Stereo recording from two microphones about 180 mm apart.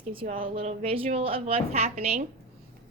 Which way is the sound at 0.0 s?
35° right (ahead or behind).